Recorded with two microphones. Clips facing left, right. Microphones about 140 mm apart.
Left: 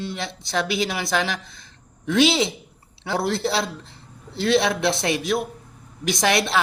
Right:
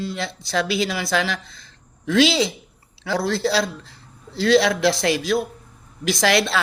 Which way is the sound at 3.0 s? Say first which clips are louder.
Right 2 dB; 25° left (ahead or behind).